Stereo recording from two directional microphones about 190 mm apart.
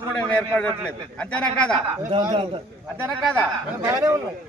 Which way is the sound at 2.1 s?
25° right (ahead or behind).